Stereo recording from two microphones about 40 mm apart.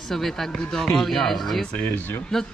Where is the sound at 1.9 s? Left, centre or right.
Left.